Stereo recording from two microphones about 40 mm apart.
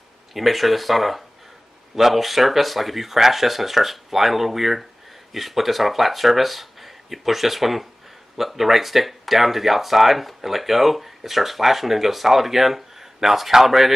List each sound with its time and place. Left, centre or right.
0.3 s speech: centre